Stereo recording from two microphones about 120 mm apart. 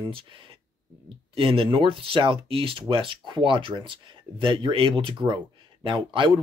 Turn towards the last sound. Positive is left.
turn(degrees=-45)  # may be behind; listen again after turning